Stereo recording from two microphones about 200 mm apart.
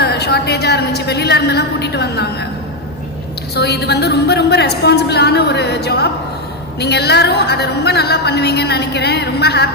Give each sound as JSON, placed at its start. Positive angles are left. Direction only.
{"t": 0.0, "sound": "a woman's voice", "side_deg": 55}
{"t": 3.5, "sound": "a woman's voice", "side_deg": 55}